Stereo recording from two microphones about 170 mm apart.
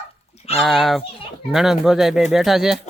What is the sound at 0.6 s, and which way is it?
A child's voice, centre (ahead or behind).